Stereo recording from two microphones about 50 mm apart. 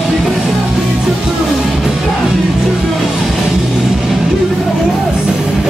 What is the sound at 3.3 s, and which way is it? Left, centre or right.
Music, centre.